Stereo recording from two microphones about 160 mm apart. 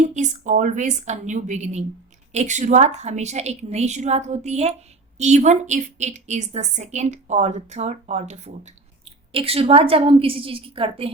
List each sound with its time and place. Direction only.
0.1 s a woman's voice: 50° right (ahead or behind)